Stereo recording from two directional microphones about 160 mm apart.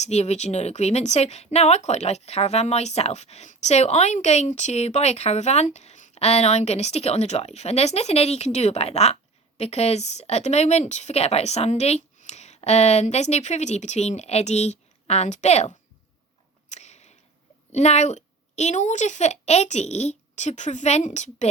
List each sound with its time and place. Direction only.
0.0 s speech: 45° left (ahead or behind)
16.6 s a sound: 45° left (ahead or behind)
17.7 s speech: 45° left (ahead or behind)